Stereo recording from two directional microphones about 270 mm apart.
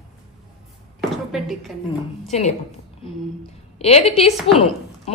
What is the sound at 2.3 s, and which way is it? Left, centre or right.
Speech, left.